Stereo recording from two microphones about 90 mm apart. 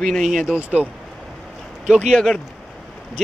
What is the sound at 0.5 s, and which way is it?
Speech, 15° right (ahead or behind).